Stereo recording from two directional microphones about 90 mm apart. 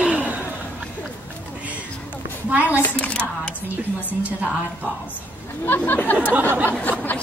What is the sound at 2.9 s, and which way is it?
Speech, 15° left (ahead or behind).